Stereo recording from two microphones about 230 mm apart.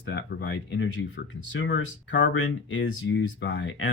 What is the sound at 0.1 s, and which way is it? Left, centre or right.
Speech, left.